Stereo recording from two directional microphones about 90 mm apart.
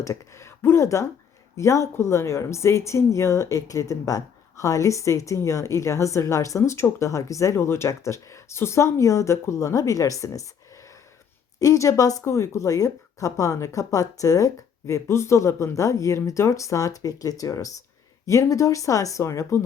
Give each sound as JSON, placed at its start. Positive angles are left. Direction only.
{"t": 0.0, "sound": "speech", "side_deg": 35}